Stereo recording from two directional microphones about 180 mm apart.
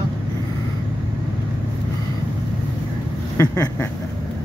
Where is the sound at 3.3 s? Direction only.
20° left (ahead or behind).